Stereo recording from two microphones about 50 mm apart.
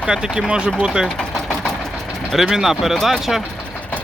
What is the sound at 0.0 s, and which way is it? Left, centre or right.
Speech, centre.